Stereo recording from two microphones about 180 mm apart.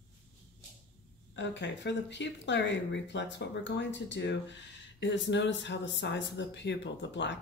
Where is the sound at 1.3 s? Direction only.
80° left.